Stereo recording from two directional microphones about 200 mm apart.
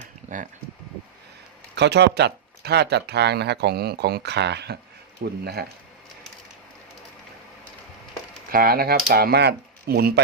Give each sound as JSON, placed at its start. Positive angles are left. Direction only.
{"t": 1.7, "sound": "speech", "side_deg": -60}
{"t": 8.4, "sound": "speech", "side_deg": -45}